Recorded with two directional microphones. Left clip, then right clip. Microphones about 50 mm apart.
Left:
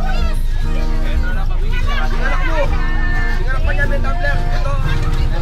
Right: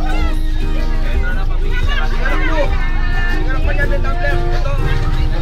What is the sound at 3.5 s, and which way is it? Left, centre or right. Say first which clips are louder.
Music: left 2 dB; centre.